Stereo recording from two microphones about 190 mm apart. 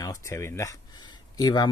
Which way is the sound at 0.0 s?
15° left (ahead or behind).